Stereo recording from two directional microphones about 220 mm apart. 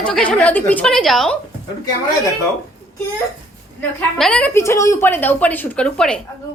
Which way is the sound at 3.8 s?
5° left (ahead or behind).